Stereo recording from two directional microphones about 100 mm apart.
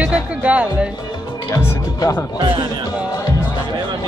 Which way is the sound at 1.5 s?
30° left (ahead or behind).